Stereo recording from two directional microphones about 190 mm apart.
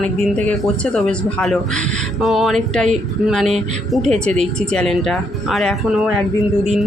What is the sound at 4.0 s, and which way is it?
Speech, 35° right (ahead or behind).